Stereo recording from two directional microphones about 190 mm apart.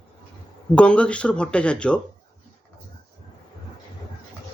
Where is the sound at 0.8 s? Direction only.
5° left (ahead or behind).